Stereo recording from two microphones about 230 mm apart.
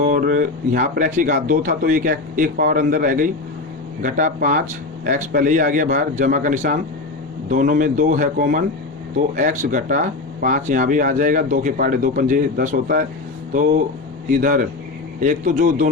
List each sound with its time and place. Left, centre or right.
0.0 s speech: right
14.3 s speech: right